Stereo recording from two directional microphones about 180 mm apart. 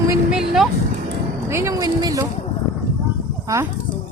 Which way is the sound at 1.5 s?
15° right (ahead or behind).